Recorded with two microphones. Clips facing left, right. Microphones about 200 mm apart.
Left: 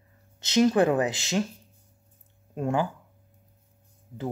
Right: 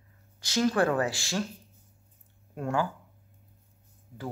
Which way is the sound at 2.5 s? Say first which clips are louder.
Left 3 dB; 20° left (ahead or behind).